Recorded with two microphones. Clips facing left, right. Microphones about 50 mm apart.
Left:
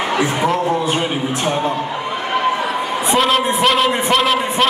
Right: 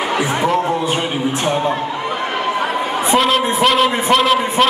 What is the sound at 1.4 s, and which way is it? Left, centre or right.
Speech, centre.